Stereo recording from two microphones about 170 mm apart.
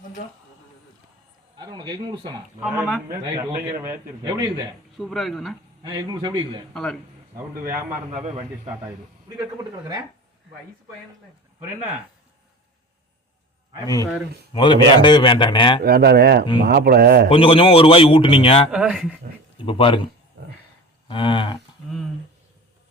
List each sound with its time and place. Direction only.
1.5 s a man's voice: 25° right (ahead or behind)
2.6 s speech: 5° right (ahead or behind)
3.1 s a man's voice: 15° right (ahead or behind)
4.9 s speech: centre (ahead or behind)
5.8 s a man's voice: 25° right (ahead or behind)
13.8 s a man's voice: 20° left (ahead or behind)
15.8 s speech: 65° right (ahead or behind)
17.2 s a man's voice: 30° left (ahead or behind)
18.7 s speech: 5° right (ahead or behind)
19.5 s a man's voice: 30° left (ahead or behind)
20.4 s a sound: 85° right
21.1 s a man's voice: 30° left (ahead or behind)